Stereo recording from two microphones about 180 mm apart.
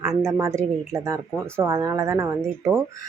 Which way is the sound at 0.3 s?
15° right (ahead or behind).